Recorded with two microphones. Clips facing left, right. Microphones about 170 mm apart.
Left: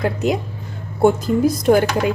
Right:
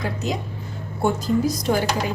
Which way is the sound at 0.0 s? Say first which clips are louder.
Left 7 dB; 55° left (ahead or behind).